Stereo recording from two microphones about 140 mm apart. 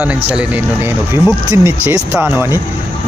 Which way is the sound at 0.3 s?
10° right (ahead or behind).